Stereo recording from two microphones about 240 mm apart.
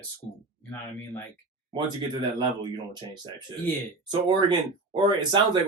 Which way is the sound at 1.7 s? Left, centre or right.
Centre.